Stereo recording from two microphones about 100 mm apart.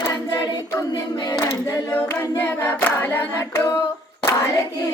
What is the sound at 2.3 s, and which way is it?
Singing, 20° left (ahead or behind).